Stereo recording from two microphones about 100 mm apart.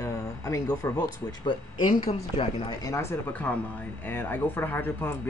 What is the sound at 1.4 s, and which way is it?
Speech, 55° left (ahead or behind).